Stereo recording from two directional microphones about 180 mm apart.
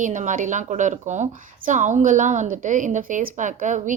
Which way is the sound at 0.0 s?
45° right (ahead or behind).